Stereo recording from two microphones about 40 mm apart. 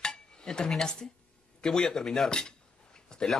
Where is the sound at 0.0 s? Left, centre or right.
Centre.